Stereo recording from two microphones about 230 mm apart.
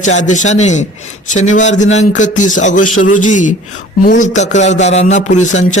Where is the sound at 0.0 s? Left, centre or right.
Left.